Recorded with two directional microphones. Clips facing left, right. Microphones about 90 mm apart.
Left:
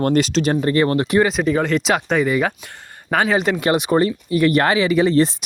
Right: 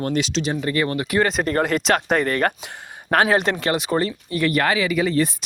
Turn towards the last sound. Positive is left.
turn(degrees=25)  # may be behind; listen again after turning